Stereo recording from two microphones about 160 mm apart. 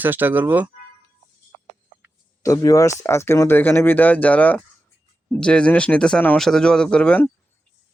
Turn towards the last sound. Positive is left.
turn(degrees=10)  # may be behind; listen again after turning